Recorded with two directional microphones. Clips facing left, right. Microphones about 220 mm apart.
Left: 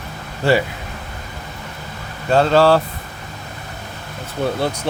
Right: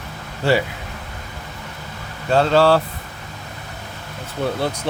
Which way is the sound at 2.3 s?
45° left (ahead or behind).